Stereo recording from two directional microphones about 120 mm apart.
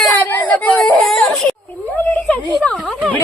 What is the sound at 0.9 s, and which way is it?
Baby cry, 5° left (ahead or behind).